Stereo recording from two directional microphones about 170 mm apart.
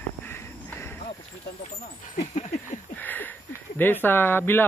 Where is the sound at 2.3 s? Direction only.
50° left (ahead or behind).